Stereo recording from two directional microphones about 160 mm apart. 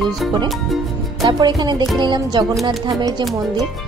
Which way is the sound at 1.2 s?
25° right (ahead or behind).